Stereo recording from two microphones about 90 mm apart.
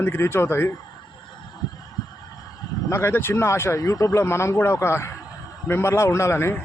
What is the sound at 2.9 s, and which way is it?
A man's voice, 25° left (ahead or behind).